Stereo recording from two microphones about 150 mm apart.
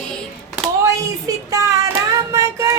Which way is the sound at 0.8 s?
20° right (ahead or behind).